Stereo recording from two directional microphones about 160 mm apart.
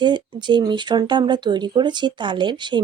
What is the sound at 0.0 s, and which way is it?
Speech, 30° right (ahead or behind).